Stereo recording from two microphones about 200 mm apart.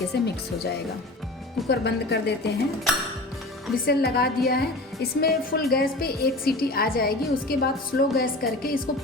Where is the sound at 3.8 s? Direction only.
50° left (ahead or behind).